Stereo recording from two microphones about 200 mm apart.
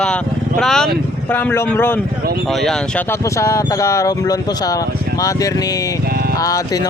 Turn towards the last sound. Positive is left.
turn(degrees=15)  # may be behind; listen again after turning